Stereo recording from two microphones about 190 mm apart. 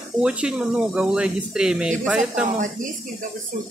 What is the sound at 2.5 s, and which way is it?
Speech, 45° right (ahead or behind).